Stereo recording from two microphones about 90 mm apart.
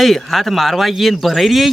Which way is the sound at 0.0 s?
Centre (ahead or behind).